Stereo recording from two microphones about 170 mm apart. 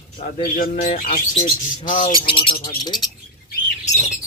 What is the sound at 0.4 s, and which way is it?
Speech, 50° left (ahead or behind).